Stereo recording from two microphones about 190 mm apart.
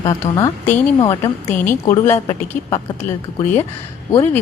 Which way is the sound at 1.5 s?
10° left (ahead or behind).